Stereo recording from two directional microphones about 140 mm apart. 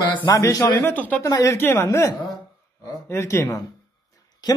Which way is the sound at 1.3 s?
25° left (ahead or behind).